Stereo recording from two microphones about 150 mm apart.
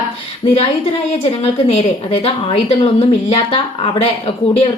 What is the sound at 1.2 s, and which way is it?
A woman's voice, 40° left (ahead or behind).